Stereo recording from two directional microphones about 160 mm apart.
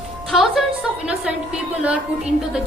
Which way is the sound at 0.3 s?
Centre (ahead or behind).